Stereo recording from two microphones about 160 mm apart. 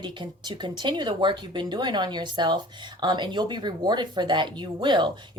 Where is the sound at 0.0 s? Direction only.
30° right (ahead or behind).